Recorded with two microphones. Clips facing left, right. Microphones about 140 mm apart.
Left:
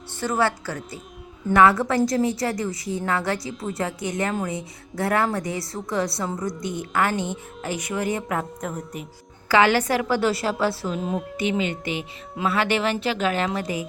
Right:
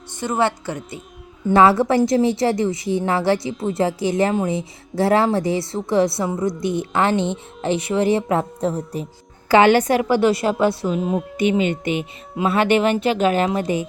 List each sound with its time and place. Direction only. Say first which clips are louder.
0.2 s speech: right 3 dB; 20° right (ahead or behind)
9.5 s speech: right 5 dB; 20° right (ahead or behind)
10.9 s a woman's voice: right 5 dB; centre (ahead or behind)
11.3 s speech: right 7 dB; 20° right (ahead or behind)